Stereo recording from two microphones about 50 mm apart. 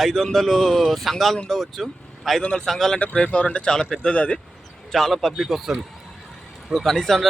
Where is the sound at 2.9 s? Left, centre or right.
Left.